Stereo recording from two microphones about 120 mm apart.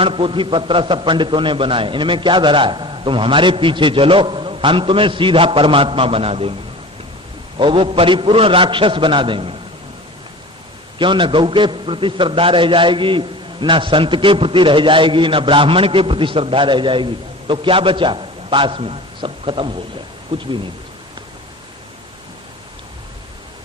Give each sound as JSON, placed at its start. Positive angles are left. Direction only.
{"t": 0.0, "sound": "a man's voice", "side_deg": -50}
{"t": 10.9, "sound": "a man's voice", "side_deg": -45}
{"t": 20.3, "sound": "speech", "side_deg": -55}